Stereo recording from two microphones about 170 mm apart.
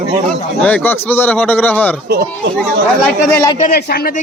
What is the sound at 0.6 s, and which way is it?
Speech, 10° left (ahead or behind).